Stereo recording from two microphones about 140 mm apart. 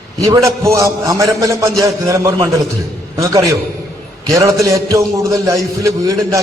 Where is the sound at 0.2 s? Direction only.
25° right (ahead or behind).